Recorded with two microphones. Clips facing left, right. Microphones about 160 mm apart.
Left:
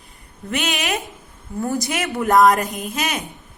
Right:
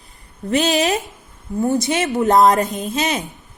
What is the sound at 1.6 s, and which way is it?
A woman's voice, 20° right (ahead or behind).